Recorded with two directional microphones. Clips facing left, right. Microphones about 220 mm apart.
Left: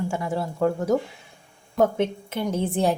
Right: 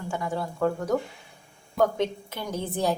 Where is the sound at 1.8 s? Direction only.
25° left (ahead or behind).